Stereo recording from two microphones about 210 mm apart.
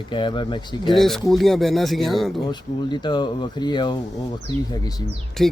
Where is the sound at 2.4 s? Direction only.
20° left (ahead or behind).